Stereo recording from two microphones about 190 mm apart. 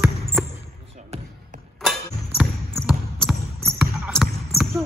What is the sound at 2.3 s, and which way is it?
Basketball bounce, 5° right (ahead or behind).